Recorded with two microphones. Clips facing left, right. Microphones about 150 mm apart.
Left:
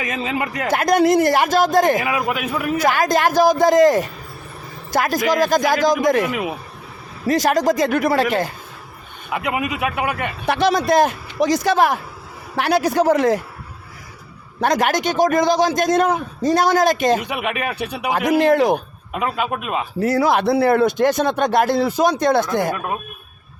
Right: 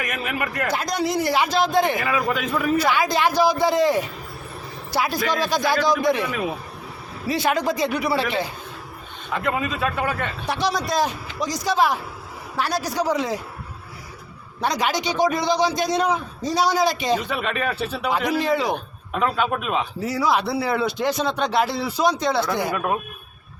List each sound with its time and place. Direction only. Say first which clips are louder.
0.0 s a man's voice: left 4 dB; 25° left (ahead or behind)
0.7 s speech: left 11 dB; 55° left (ahead or behind)
2.0 s a man's voice: left 2 dB; 15° left (ahead or behind)
2.7 s speech: left 5 dB; 45° left (ahead or behind)
7.3 s speech: left 5 dB; 40° left (ahead or behind)
9.3 s a man's voice: left 2 dB; 10° left (ahead or behind)
10.4 s a man's voice: left 8 dB; 55° left (ahead or behind)
14.6 s speech: left 5 dB; 50° left (ahead or behind)
17.2 s a man's voice: left 1 dB; 15° left (ahead or behind)
18.1 s speech: left 7 dB; 50° left (ahead or behind)
19.1 s speech: even; 10° left (ahead or behind)
20.0 s speech: left 7 dB; 55° left (ahead or behind)